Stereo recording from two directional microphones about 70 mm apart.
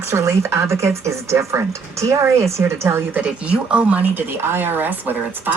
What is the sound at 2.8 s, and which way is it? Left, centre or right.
Speech, right.